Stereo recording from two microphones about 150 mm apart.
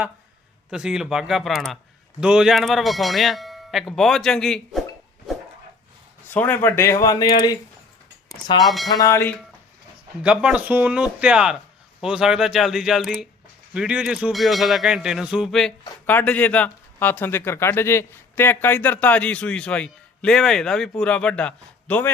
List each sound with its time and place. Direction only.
0.7 s speech: 5° right (ahead or behind)
6.3 s speech: 10° left (ahead or behind)
8.6 s speech: centre (ahead or behind)
8.9 s speech: 25° left (ahead or behind)
10.2 s speech: 10° right (ahead or behind)
16.0 s speech: 10° left (ahead or behind)